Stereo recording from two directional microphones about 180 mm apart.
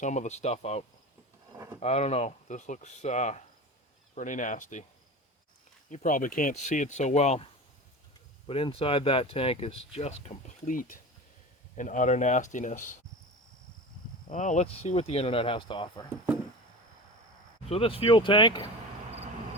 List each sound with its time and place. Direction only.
0.0 s speech: 40° left (ahead or behind)
1.5 s speech: 15° right (ahead or behind)
1.8 s speech: 35° left (ahead or behind)
5.9 s speech: 45° left (ahead or behind)
8.4 s speech: 30° left (ahead or behind)
14.3 s speech: 45° left (ahead or behind); by 16.0 s 25° left (ahead or behind)
17.7 s speech: 30° left (ahead or behind)